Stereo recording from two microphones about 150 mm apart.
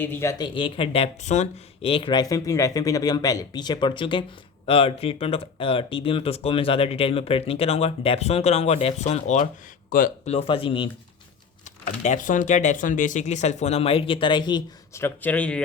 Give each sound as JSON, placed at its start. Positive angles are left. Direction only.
{"t": 0.0, "sound": "speech", "side_deg": 15}
{"t": 9.9, "sound": "speech", "side_deg": 65}
{"t": 10.2, "sound": "speech", "side_deg": 40}
{"t": 12.0, "sound": "speech", "side_deg": 60}
{"t": 14.9, "sound": "speech", "side_deg": 15}